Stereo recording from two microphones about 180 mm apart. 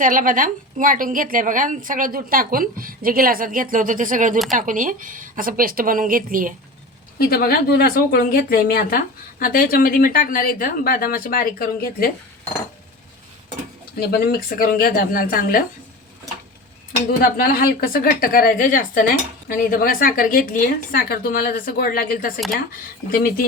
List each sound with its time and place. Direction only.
0.0 s a woman's voice: 50° right (ahead or behind)
7.2 s speech: 60° left (ahead or behind)
14.0 s speech: 60° left (ahead or behind)
17.1 s speech: 55° left (ahead or behind)